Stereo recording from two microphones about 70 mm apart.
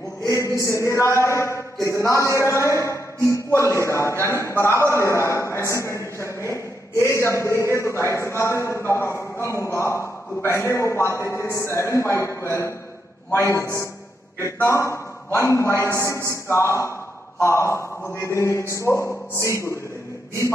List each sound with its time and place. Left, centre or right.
0.3 s a man's voice: left